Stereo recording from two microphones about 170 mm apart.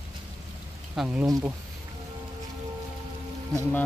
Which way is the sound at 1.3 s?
20° right (ahead or behind).